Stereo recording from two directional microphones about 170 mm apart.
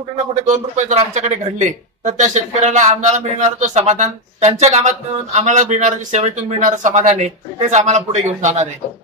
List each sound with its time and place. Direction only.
0.5 s speech: 45° right (ahead or behind)